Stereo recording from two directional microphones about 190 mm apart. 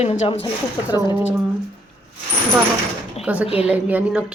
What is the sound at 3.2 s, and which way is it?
A woman's voice, 5° right (ahead or behind).